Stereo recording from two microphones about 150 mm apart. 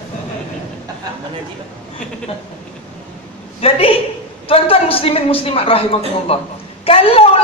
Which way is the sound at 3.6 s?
40° left (ahead or behind).